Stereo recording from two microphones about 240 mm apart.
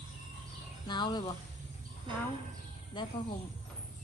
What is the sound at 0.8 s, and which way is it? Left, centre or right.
Speech, centre.